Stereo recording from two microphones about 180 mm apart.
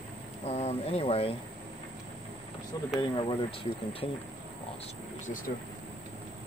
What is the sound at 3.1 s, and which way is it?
Speech, 30° left (ahead or behind).